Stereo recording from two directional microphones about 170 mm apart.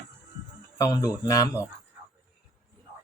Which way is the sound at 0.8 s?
20° left (ahead or behind).